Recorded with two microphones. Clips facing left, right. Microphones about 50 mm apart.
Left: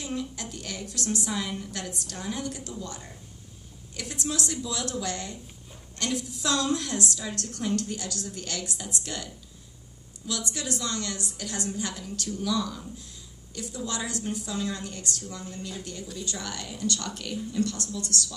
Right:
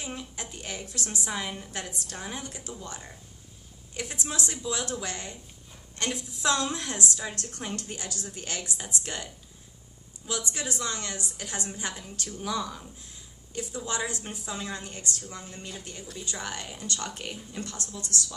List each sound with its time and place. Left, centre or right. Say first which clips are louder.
0.0 s a woman's voice: left 4 dB; right
3.9 s a woman's voice: left 2 dB; right